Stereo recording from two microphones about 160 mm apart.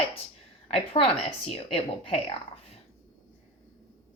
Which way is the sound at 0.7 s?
35° left (ahead or behind).